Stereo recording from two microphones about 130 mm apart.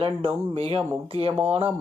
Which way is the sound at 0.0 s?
45° right (ahead or behind).